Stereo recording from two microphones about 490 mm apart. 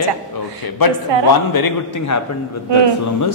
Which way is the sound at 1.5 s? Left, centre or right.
Left.